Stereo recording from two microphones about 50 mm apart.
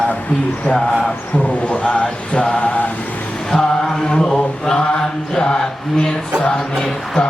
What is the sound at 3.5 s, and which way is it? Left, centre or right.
Mantra, centre.